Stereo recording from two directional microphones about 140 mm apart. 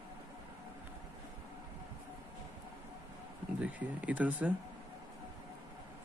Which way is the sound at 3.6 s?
10° right (ahead or behind).